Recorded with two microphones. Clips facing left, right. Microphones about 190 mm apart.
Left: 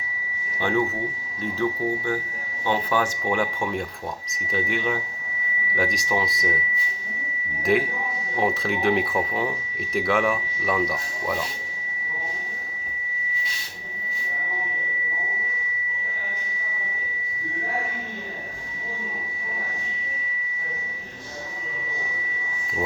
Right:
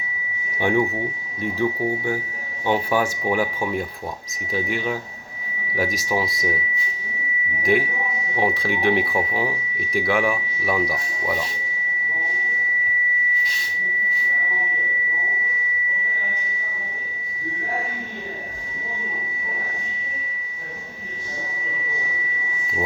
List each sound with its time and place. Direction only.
0.6 s speech: 15° right (ahead or behind)
2.6 s speech: 10° right (ahead or behind)
4.5 s speech: centre (ahead or behind)
7.6 s speech: centre (ahead or behind)